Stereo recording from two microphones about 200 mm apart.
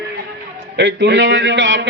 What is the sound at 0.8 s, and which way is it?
A man's voice, 60° right (ahead or behind).